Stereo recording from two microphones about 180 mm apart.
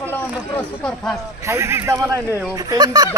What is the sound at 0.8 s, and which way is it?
Speech, centre (ahead or behind).